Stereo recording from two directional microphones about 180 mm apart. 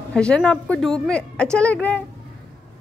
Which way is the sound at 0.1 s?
5° left (ahead or behind).